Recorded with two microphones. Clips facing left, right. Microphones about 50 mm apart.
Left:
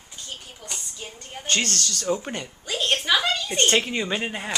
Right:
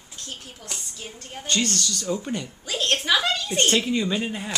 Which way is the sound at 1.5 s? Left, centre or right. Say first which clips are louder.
Even; left.